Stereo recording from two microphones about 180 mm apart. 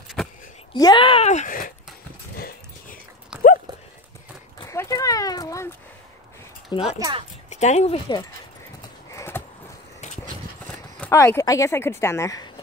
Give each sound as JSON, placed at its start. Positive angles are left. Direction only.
{"t": 0.2, "sound": "a sound", "side_deg": 5}
{"t": 0.7, "sound": "speech", "side_deg": 25}
{"t": 2.3, "sound": "dog", "side_deg": 55}
{"t": 4.6, "sound": "dog", "side_deg": 15}
{"t": 6.7, "sound": "speech", "side_deg": 30}
{"t": 7.0, "sound": "speech", "side_deg": -25}
{"t": 7.4, "sound": "speech", "side_deg": 40}
{"t": 9.1, "sound": "a sound", "side_deg": 15}
{"t": 10.7, "sound": "speech", "side_deg": 10}